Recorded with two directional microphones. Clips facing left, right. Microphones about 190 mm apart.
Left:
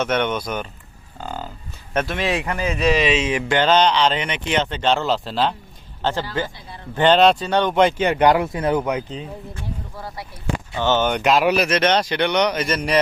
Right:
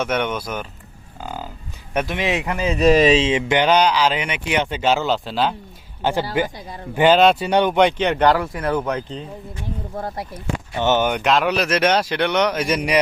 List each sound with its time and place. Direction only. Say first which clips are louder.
0.0 s speech: left 1 dB; 10° right (ahead or behind)
1.2 s livestock: even; 10° right (ahead or behind)
1.9 s speech: even; 15° right (ahead or behind)
2.7 s speech: right 5 dB; 45° right (ahead or behind)
3.2 s speech: right 2 dB; 25° right (ahead or behind); by 5.5 s centre (ahead or behind)
6.0 s speech: right 3 dB; 10° right (ahead or behind)
7.8 s speech: even; 5° left (ahead or behind)
9.9 s speech: right 6 dB; 50° right (ahead or behind)
10.8 s speech: right 1 dB; 15° right (ahead or behind)
11.1 s speech: left 1 dB; 5° left (ahead or behind)
11.7 s speech: even; 5° right (ahead or behind)
12.6 s speech: right 1 dB; 15° right (ahead or behind)